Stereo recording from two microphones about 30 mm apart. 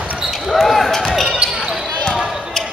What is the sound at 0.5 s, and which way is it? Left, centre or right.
Basketball bounce, centre.